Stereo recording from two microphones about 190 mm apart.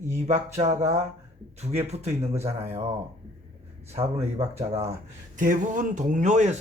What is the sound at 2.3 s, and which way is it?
Speech, 15° right (ahead or behind).